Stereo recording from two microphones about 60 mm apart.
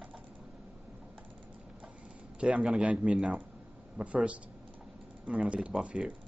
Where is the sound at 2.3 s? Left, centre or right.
Centre.